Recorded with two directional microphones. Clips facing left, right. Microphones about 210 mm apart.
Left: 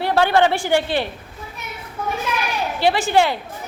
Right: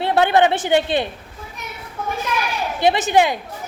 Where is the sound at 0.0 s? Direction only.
20° right (ahead or behind).